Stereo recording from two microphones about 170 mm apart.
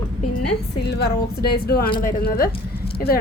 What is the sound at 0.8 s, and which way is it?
A woman's voice, 75° left (ahead or behind).